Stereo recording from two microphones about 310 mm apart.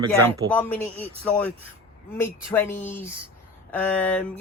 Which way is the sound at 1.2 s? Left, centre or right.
Centre.